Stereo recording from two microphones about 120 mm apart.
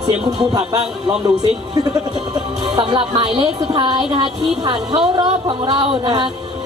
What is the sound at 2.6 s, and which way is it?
A woman's voice, 40° right (ahead or behind).